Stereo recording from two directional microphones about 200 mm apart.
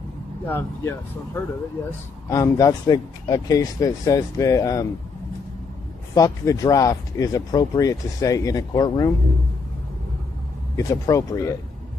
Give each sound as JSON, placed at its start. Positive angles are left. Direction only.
{"t": 0.5, "sound": "speech", "side_deg": 10}
{"t": 6.1, "sound": "speech", "side_deg": 15}
{"t": 10.8, "sound": "speech", "side_deg": 15}